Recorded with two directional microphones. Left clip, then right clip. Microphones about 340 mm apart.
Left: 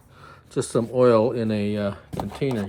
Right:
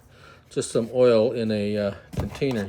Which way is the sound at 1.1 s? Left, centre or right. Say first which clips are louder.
Left 1 dB; left.